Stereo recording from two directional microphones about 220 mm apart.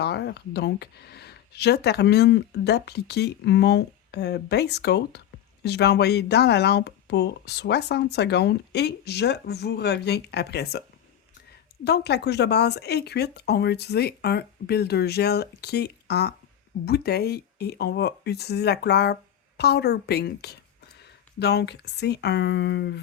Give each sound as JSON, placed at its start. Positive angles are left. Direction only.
{"t": 0.0, "sound": "speech", "side_deg": 50}
{"t": 11.9, "sound": "a woman's voice", "side_deg": 50}